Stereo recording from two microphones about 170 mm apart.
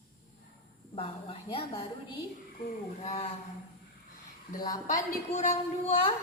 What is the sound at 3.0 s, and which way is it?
Speech, 40° left (ahead or behind).